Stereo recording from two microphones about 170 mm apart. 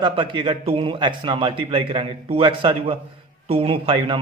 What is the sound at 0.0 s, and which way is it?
A man's voice, 30° right (ahead or behind).